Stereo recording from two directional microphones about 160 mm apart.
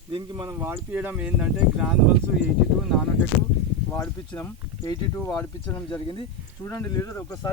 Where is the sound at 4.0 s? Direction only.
20° left (ahead or behind).